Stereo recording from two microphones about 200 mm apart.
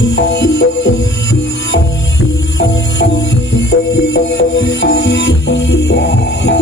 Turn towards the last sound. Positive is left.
turn(degrees=60)  # may be behind; listen again after turning